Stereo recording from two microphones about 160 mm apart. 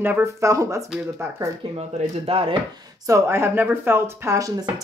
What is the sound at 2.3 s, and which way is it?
Speech, 35° right (ahead or behind).